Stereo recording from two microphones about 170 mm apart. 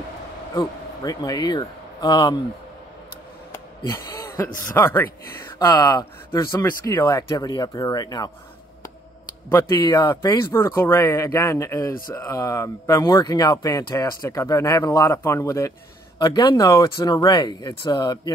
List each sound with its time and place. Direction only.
0.6 s speech: 20° left (ahead or behind)
3.5 s a sound: 15° left (ahead or behind)
4.7 s speech: 15° left (ahead or behind)
9.5 s speech: 20° left (ahead or behind)